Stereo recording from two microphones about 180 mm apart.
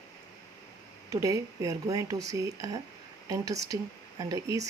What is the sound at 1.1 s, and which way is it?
Speech, 15° right (ahead or behind).